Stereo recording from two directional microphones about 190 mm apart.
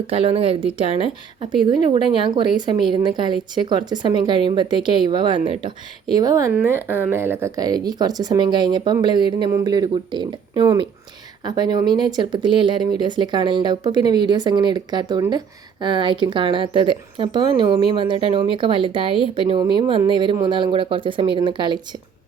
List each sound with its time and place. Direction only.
0.1 s speech: 30° right (ahead or behind)